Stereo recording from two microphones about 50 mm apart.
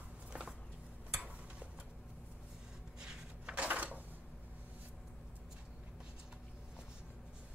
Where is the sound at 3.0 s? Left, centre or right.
Centre.